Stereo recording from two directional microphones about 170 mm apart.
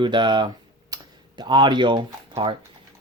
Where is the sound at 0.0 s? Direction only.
25° right (ahead or behind).